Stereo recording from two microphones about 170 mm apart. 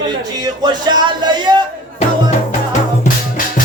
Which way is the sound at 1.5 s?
25° right (ahead or behind).